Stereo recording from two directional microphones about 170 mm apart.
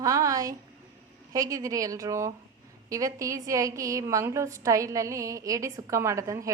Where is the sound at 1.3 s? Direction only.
20° right (ahead or behind).